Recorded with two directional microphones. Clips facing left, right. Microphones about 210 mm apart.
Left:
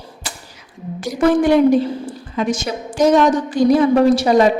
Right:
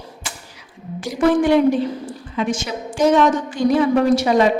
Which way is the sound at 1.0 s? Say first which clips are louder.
Left 2 dB; 40° left (ahead or behind).